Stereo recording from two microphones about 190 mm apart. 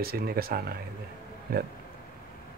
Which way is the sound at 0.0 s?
55° right (ahead or behind).